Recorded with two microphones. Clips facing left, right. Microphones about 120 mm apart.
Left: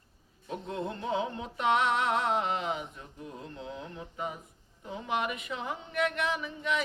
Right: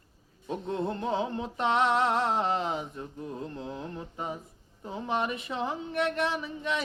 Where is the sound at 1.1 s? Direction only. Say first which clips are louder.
Right 2 dB; 35° right (ahead or behind).